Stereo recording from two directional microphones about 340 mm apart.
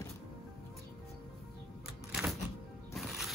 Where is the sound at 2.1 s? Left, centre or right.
Centre.